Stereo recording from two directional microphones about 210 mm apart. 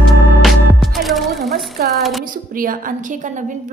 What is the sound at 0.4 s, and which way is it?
Music, centre (ahead or behind).